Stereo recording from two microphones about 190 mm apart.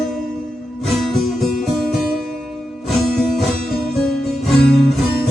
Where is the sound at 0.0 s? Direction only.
Centre (ahead or behind).